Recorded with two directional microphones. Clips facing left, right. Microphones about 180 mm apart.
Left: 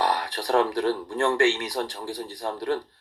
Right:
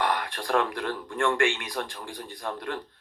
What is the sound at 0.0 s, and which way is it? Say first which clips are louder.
Speech: left 2 dB; 35° left (ahead or behind).